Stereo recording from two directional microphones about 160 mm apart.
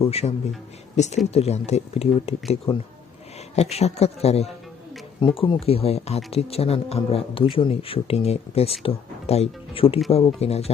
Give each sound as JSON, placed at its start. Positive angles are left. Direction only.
{"t": 0.0, "sound": "speech", "side_deg": 40}